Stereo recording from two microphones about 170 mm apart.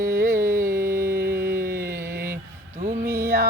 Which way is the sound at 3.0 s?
15° right (ahead or behind).